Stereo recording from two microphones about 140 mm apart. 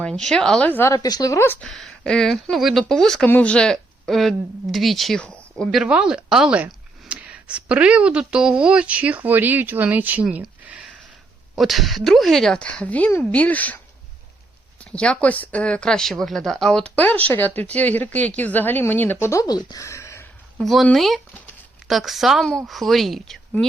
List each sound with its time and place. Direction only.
0.0 s speech: 5° left (ahead or behind)
0.9 s a woman's voice: 25° left (ahead or behind)
1.6 s speech: 5° left (ahead or behind)
5.8 s speech: 5° right (ahead or behind); by 13.7 s 10° left (ahead or behind)
14.8 s speech: 5° left (ahead or behind)
20.6 s speech: centre (ahead or behind)